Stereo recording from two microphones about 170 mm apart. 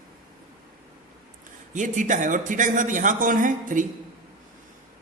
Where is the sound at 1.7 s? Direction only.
50° right (ahead or behind).